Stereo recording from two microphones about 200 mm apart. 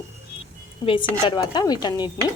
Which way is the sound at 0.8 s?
25° left (ahead or behind).